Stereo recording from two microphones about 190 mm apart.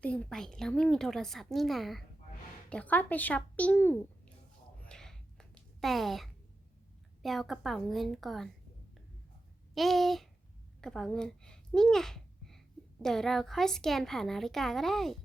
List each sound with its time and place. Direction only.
0.0 s a woman's voice: 5° left (ahead or behind)
4.9 s a sound: 5° left (ahead or behind)
7.2 s a woman's voice: centre (ahead or behind)
9.7 s a woman's voice: centre (ahead or behind)